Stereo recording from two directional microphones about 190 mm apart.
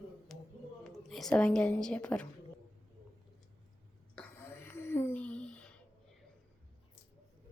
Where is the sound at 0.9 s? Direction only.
Centre (ahead or behind).